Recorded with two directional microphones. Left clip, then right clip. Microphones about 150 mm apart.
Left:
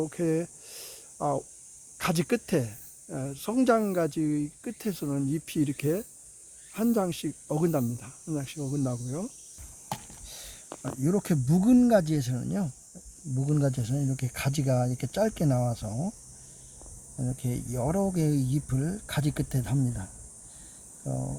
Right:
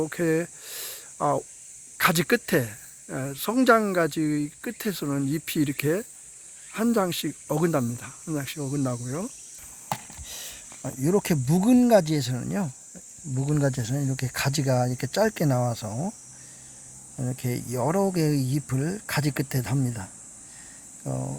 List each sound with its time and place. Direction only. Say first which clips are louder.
0.1 s a sound: right 4 dB; 15° right (ahead or behind)
2.0 s speech: right 7 dB; 15° right (ahead or behind)
10.2 s a sound: right 8 dB; centre (ahead or behind)
11.0 s speech: right 5 dB; 5° right (ahead or behind)
15.9 s speech: right 3 dB; 25° right (ahead or behind)
17.3 s speech: right 6 dB; 5° right (ahead or behind)
21.1 s speech: right 3 dB; 20° right (ahead or behind)